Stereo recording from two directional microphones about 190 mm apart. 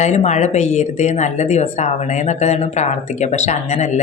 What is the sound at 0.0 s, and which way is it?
Speech, 35° left (ahead or behind).